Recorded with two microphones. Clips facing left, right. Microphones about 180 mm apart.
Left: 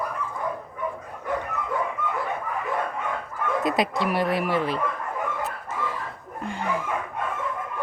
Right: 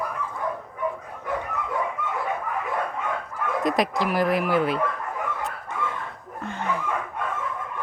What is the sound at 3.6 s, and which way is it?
Speech, centre (ahead or behind).